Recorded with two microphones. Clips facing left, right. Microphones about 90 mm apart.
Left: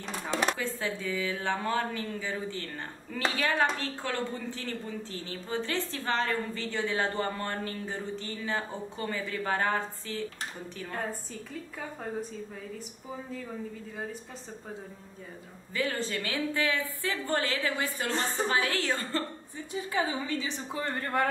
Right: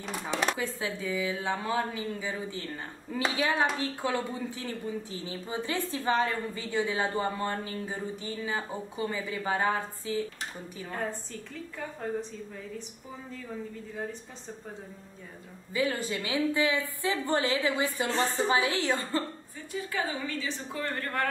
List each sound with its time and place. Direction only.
0.0 s a woman's voice: 10° right (ahead or behind)
15.7 s speech: 10° right (ahead or behind)
19.7 s a woman's voice: 20° left (ahead or behind)